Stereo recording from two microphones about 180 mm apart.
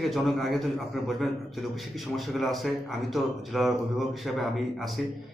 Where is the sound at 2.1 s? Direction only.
Centre (ahead or behind).